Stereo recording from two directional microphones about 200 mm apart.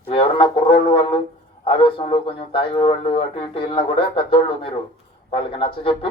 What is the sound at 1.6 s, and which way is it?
A man's voice, 25° left (ahead or behind).